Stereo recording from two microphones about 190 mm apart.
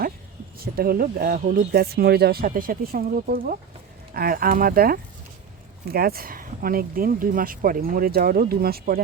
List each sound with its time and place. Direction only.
0.6 s speech: 50° right (ahead or behind)